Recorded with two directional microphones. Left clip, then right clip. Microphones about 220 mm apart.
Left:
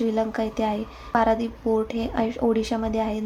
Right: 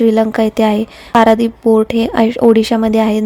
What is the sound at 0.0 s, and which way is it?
A woman's voice, 45° right (ahead or behind).